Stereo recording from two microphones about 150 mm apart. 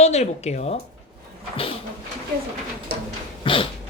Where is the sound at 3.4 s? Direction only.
35° left (ahead or behind).